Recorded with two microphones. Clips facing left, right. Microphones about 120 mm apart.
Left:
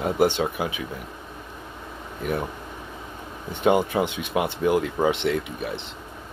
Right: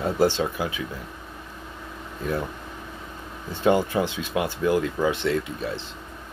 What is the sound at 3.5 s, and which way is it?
Speech, 20° left (ahead or behind).